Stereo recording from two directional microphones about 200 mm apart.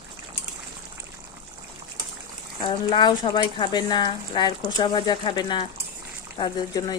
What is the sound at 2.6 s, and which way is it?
Speech, 25° left (ahead or behind).